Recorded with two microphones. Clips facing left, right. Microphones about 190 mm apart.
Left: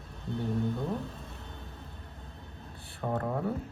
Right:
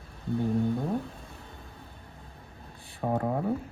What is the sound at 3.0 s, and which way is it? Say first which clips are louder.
Speech: right 4 dB; 40° right (ahead or behind).